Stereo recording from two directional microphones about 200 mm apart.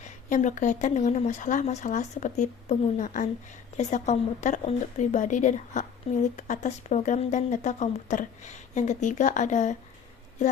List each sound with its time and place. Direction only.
0.0 s speech: 40° left (ahead or behind)